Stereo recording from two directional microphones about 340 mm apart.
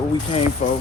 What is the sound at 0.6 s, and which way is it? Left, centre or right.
Speech, centre.